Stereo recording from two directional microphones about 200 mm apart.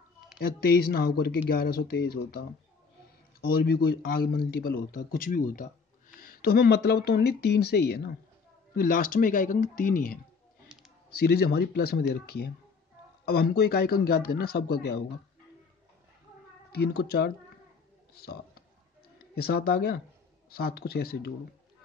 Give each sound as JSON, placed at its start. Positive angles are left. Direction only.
{"t": 0.4, "sound": "speech", "side_deg": 50}
{"t": 11.2, "sound": "speech", "side_deg": 50}
{"t": 16.7, "sound": "a man's voice", "side_deg": 55}